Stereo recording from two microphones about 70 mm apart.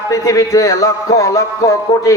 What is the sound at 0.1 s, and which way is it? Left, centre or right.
A man's voice, left.